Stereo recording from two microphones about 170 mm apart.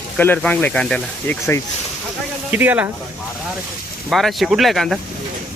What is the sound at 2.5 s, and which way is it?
Speech, 10° right (ahead or behind).